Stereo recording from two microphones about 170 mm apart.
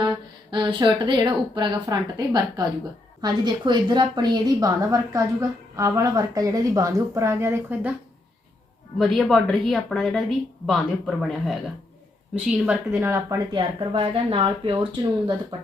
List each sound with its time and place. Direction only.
0.5 s a woman's voice: 25° right (ahead or behind)
9.0 s a woman's voice: centre (ahead or behind)
12.9 s speech: 15° right (ahead or behind)
13.5 s a woman's voice: 30° right (ahead or behind)